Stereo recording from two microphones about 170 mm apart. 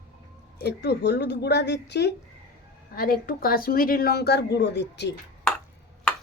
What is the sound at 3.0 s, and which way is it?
A woman's voice, 60° left (ahead or behind).